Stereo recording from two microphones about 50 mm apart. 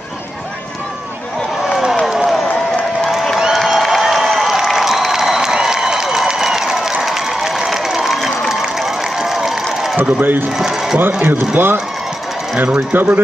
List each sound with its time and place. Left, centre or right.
1.7 s a sound: centre
3.5 s crowd: centre
9.9 s speech: right
10.6 s speech: centre
11.2 s speech: right